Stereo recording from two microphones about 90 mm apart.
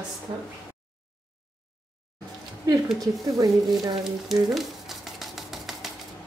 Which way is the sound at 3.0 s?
45° right (ahead or behind).